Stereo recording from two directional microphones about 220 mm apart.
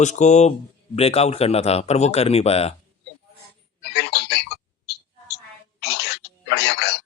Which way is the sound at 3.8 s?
50° left (ahead or behind).